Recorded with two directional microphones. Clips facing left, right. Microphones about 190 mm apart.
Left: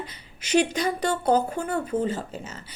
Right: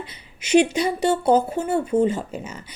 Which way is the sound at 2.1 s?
10° right (ahead or behind).